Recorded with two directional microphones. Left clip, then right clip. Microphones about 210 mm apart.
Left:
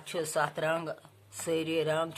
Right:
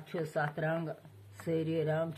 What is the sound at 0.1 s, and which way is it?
Speech, 30° left (ahead or behind).